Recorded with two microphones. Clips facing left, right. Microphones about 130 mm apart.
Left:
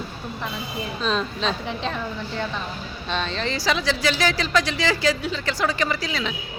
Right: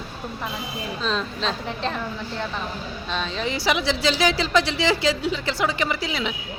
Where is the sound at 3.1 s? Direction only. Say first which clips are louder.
Left 1 dB; 5° right (ahead or behind).